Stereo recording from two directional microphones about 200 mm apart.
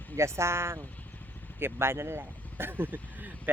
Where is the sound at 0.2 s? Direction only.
15° right (ahead or behind).